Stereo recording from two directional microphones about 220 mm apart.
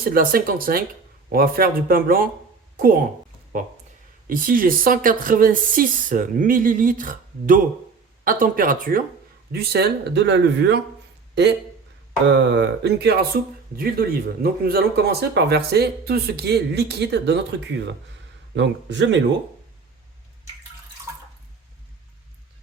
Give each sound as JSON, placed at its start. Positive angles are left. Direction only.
{"t": 0.0, "sound": "speech", "side_deg": -40}
{"t": 4.3, "sound": "speech", "side_deg": -40}
{"t": 12.3, "sound": "speech", "side_deg": -55}
{"t": 18.5, "sound": "a man's voice", "side_deg": -55}
{"t": 21.1, "sound": "drip", "side_deg": -10}